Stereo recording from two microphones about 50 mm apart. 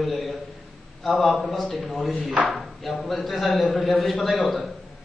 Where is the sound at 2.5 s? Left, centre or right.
Centre.